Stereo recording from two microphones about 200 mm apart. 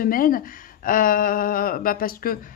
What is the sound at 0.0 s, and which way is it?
Speech, 45° left (ahead or behind).